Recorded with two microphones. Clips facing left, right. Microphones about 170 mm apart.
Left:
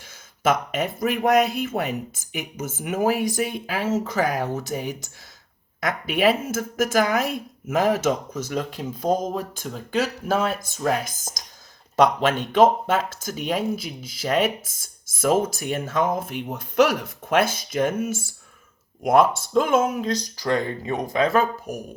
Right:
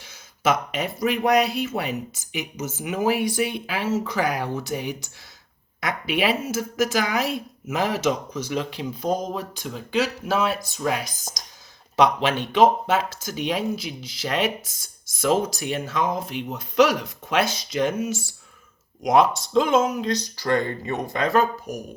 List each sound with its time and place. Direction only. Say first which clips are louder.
0.4 s speech: left 1 dB; 50° left (ahead or behind)
20.0 s speech: even; 5° left (ahead or behind)